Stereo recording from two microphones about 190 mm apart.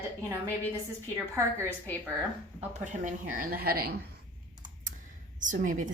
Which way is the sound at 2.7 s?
40° right (ahead or behind).